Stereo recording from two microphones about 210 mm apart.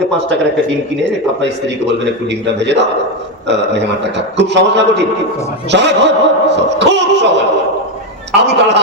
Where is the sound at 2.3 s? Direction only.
55° right (ahead or behind).